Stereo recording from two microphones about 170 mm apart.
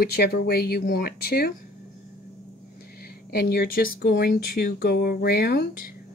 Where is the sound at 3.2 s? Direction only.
65° left (ahead or behind).